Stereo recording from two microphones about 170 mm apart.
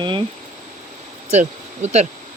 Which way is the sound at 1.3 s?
40° right (ahead or behind).